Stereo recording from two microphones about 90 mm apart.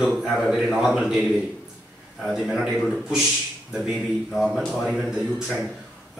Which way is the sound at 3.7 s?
5° right (ahead or behind).